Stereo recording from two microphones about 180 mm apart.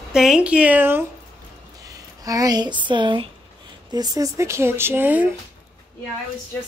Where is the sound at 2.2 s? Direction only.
20° right (ahead or behind).